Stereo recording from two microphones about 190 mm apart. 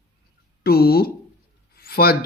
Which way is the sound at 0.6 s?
55° left (ahead or behind).